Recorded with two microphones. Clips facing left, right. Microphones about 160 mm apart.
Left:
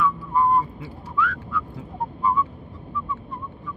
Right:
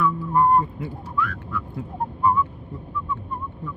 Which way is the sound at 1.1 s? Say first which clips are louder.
Left 3 dB; 50° right (ahead or behind).